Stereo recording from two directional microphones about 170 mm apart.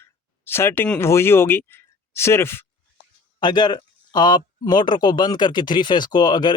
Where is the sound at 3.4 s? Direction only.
25° left (ahead or behind).